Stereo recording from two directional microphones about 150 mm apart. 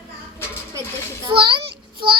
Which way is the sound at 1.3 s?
35° right (ahead or behind).